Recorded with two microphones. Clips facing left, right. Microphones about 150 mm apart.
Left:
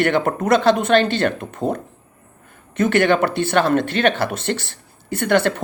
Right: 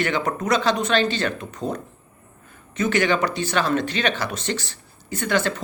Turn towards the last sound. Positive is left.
turn(degrees=60)  # may be behind; listen again after turning